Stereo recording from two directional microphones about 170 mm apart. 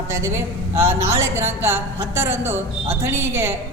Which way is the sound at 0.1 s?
15° right (ahead or behind).